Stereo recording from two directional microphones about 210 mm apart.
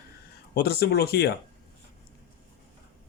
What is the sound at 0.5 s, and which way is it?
Speech, 50° left (ahead or behind).